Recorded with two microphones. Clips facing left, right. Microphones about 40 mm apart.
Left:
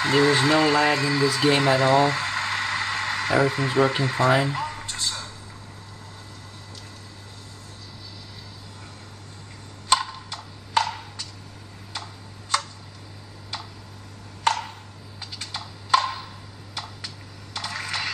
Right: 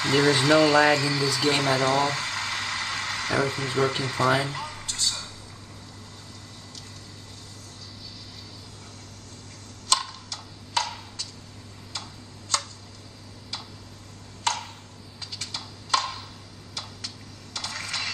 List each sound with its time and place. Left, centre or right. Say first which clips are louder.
0.0 s speech: left 2 dB; centre
9.8 s tick-tock: left 4 dB; left
14.4 s a sound: left 5 dB; centre
17.6 s coin: left 3 dB; centre